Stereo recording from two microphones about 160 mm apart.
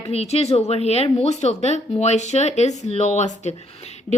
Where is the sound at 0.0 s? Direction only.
40° left (ahead or behind).